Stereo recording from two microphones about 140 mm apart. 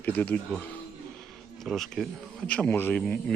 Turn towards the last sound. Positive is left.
turn(degrees=10)  # may be behind; listen again after turning